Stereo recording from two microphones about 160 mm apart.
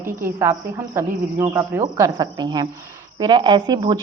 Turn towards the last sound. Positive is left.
turn(degrees=-25)  # may be behind; listen again after turning